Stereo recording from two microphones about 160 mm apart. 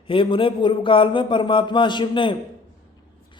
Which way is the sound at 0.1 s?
35° left (ahead or behind).